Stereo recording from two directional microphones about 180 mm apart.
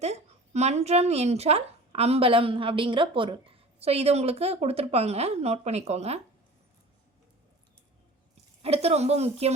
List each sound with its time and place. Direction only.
0.0 s speech: 40° right (ahead or behind)
8.6 s speech: 35° right (ahead or behind)